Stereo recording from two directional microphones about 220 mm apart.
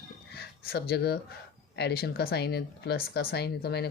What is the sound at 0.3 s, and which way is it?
Speech, 45° left (ahead or behind).